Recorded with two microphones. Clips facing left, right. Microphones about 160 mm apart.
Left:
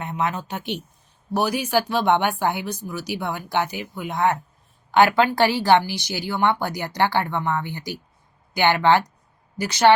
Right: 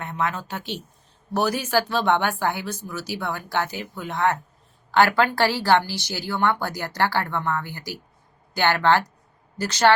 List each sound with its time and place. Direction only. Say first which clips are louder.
0.0 s a woman's voice: left 1 dB; 20° left (ahead or behind)